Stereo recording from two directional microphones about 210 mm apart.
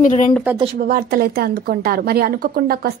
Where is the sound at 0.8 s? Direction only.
45° right (ahead or behind).